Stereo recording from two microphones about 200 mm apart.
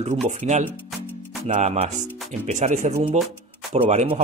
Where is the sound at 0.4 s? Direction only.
35° right (ahead or behind).